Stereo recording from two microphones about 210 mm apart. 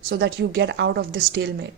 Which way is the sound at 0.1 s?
55° right (ahead or behind).